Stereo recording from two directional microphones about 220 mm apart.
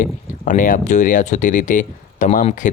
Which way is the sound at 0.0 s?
35° left (ahead or behind).